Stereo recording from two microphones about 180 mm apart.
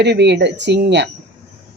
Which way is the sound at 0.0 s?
70° right (ahead or behind).